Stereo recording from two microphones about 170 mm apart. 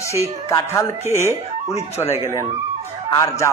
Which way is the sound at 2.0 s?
25° left (ahead or behind).